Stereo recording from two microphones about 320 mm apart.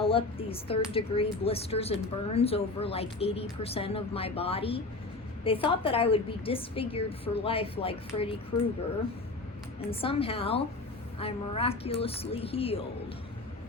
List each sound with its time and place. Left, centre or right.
0.0 s speech: centre
9.9 s speech: centre